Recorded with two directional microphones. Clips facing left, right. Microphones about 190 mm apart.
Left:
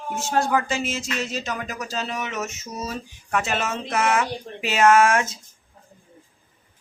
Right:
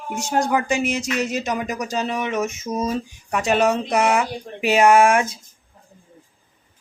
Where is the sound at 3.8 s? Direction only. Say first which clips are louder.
Right 3 dB; 15° right (ahead or behind).